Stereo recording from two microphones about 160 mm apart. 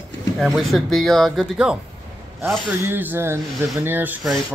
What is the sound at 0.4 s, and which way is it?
Speech, centre (ahead or behind).